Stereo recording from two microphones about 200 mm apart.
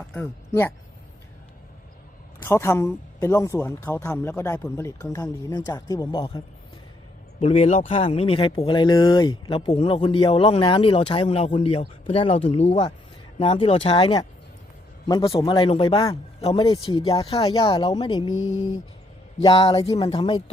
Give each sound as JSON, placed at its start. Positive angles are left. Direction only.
{"t": 0.1, "sound": "speech", "side_deg": 10}
{"t": 2.4, "sound": "a man's voice", "side_deg": 10}
{"t": 18.3, "sound": "a sound", "side_deg": 85}
{"t": 19.4, "sound": "a man's voice", "side_deg": 25}